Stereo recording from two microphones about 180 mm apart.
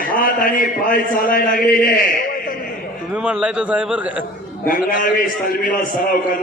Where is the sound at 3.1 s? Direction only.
5° right (ahead or behind).